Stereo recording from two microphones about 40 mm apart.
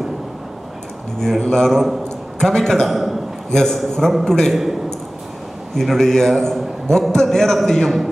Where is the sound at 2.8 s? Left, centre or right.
Centre.